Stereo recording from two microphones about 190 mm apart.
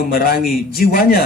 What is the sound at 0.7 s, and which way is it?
Speech, 50° left (ahead or behind).